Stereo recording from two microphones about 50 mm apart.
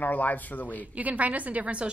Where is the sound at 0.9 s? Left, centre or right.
Right.